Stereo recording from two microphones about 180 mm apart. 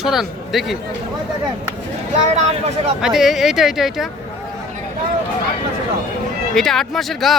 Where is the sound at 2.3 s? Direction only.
35° right (ahead or behind).